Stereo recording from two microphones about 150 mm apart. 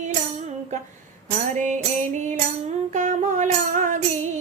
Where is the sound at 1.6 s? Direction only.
55° right (ahead or behind).